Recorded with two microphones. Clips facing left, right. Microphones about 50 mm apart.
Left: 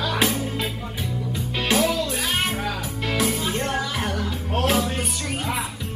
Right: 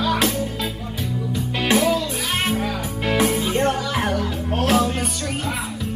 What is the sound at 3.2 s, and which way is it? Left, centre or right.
Music, right.